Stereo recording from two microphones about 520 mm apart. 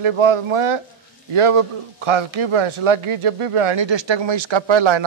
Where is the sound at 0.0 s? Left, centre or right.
Right.